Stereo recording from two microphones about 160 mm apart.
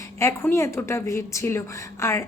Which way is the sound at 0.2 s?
20° left (ahead or behind).